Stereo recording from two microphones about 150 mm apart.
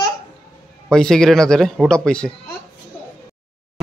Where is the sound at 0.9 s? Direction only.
5° left (ahead or behind).